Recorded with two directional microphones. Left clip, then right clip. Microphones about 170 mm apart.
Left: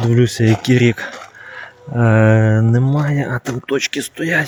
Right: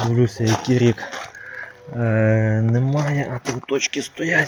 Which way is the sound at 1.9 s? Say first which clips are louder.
Left 6 dB; 70° left (ahead or behind).